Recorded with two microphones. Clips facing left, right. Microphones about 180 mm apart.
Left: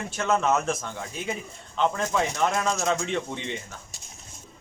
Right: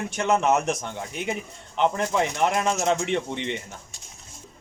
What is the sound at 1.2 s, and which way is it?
Speech, 65° right (ahead or behind).